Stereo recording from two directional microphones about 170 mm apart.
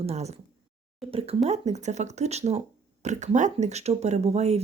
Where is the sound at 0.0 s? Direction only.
40° right (ahead or behind).